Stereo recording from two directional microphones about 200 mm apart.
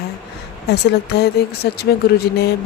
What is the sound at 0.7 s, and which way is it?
Speech, 55° left (ahead or behind).